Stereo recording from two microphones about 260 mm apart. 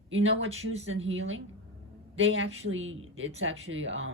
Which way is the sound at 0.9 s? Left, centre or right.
Right.